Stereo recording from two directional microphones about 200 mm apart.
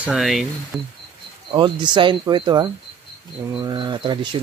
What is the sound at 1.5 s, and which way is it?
Speech, 25° right (ahead or behind).